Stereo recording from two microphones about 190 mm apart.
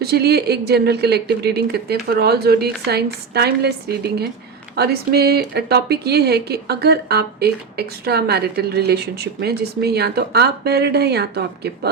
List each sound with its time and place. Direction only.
0.0 s a woman's voice: 55° right (ahead or behind)